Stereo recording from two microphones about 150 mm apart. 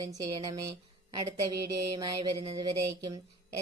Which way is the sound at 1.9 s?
30° right (ahead or behind).